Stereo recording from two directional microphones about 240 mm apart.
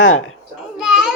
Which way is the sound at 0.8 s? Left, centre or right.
Centre.